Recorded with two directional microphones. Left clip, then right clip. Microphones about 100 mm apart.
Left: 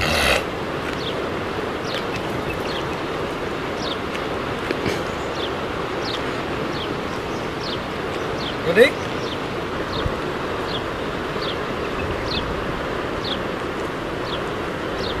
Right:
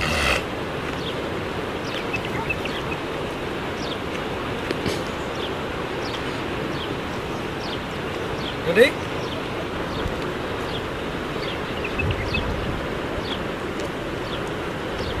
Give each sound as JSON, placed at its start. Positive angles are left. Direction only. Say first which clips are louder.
{"t": 8.6, "sound": "speech", "louder": "left 2 dB", "side_deg": 20}